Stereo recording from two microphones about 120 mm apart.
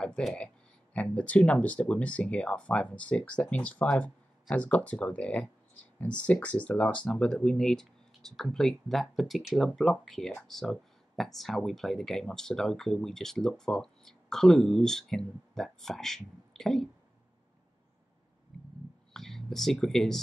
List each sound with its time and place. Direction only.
0.0 s speech: 5° left (ahead or behind)
19.1 s speech: 5° left (ahead or behind)